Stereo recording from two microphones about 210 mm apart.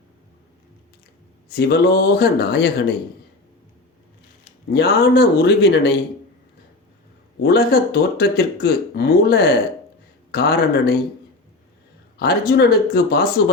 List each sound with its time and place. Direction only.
1.5 s speech: 50° left (ahead or behind)
4.7 s speech: 50° left (ahead or behind)
7.4 s speech: 45° left (ahead or behind)
12.1 s speech: 45° left (ahead or behind)